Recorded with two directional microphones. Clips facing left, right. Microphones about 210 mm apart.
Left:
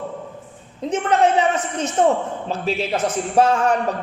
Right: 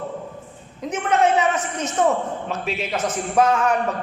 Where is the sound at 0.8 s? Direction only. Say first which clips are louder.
Left 5 dB; 30° left (ahead or behind).